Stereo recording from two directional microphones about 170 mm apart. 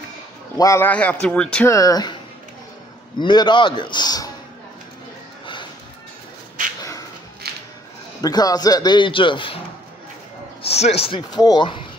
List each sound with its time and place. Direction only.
0.6 s a man's voice: 15° left (ahead or behind)
1.7 s a man's voice: 20° left (ahead or behind)
3.2 s a man's voice: 25° left (ahead or behind)
6.8 s a sound: 20° left (ahead or behind)
7.4 s a sound: 65° right (ahead or behind)
8.2 s a man's voice: 20° left (ahead or behind)
10.7 s speech: 40° left (ahead or behind)
11.1 s a man's voice: 25° left (ahead or behind)